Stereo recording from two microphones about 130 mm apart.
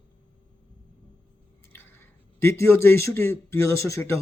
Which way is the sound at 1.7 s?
15° left (ahead or behind).